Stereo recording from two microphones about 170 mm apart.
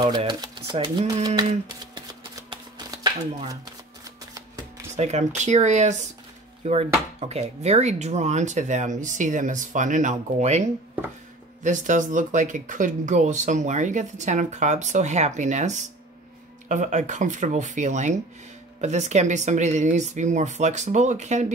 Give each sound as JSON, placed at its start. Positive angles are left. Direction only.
{"t": 0.2, "sound": "speech", "side_deg": -25}
{"t": 2.0, "sound": "shuffling cards", "side_deg": -25}
{"t": 4.9, "sound": "speech", "side_deg": -40}